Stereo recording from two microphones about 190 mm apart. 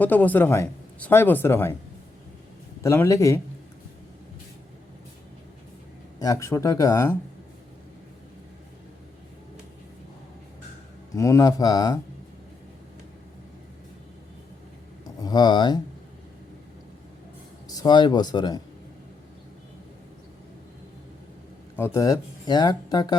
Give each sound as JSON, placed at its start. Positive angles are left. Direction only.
{"t": 0.0, "sound": "speech", "side_deg": 10}
{"t": 2.8, "sound": "speech", "side_deg": 15}
{"t": 6.1, "sound": "speech", "side_deg": 15}
{"t": 11.1, "sound": "speech", "side_deg": 15}
{"t": 15.0, "sound": "speech", "side_deg": 20}
{"t": 17.7, "sound": "speech", "side_deg": 20}
{"t": 21.8, "sound": "speech", "side_deg": 15}